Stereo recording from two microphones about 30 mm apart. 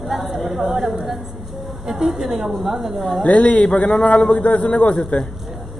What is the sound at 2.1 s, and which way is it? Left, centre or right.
Speech, centre.